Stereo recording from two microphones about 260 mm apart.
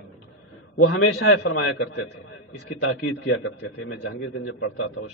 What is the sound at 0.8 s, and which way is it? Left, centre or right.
A man's voice, left.